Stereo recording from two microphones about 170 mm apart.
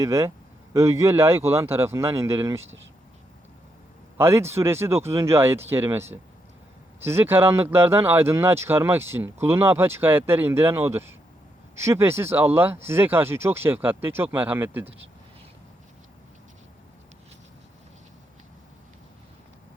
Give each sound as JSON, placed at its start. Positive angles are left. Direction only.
{"t": 0.0, "sound": "speech", "side_deg": -15}
{"t": 4.2, "sound": "speech", "side_deg": -15}